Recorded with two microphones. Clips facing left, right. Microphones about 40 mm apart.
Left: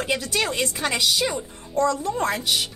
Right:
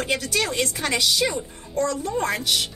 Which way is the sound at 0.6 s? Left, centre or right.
Left.